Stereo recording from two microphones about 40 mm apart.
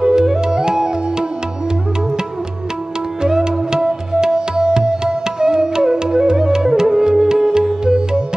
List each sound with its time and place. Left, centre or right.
0.0 s music: centre
3.2 s music: centre